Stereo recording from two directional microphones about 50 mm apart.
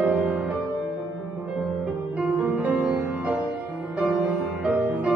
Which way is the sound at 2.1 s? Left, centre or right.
Right.